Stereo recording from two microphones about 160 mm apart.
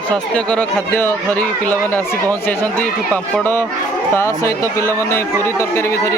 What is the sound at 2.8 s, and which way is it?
Speech, 10° left (ahead or behind).